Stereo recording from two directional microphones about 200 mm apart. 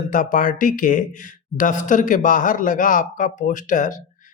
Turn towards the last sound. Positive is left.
turn(degrees=40)  # may be behind; listen again after turning